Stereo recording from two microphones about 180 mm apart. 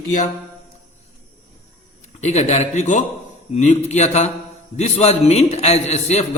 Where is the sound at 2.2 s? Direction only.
40° left (ahead or behind).